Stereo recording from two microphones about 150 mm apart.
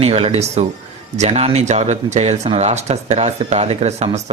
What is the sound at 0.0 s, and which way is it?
Speech, 40° right (ahead or behind).